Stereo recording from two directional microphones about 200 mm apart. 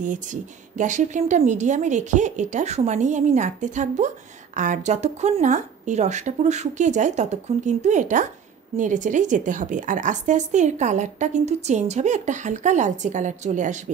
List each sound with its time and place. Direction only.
0.0 s a woman's voice: 40° right (ahead or behind)